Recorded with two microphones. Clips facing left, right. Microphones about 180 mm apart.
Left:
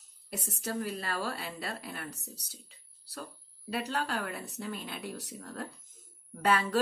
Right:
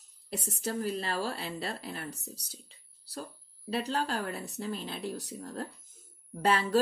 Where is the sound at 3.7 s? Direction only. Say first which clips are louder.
Right 2 dB; 30° right (ahead or behind).